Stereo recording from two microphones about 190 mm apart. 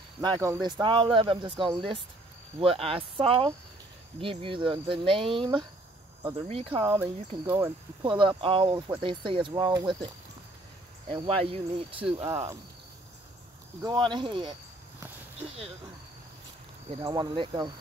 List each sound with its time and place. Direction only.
0.2 s speech: 20° right (ahead or behind)
6.9 s speech: 10° right (ahead or behind)
8.0 s speech: 25° right (ahead or behind)
13.8 s speech: 25° right (ahead or behind)
16.9 s speech: 25° right (ahead or behind)